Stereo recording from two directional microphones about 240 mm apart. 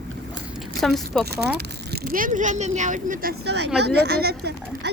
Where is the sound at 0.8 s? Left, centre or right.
Centre.